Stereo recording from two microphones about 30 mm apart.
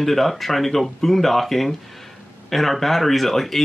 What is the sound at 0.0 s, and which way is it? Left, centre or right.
Speech, centre.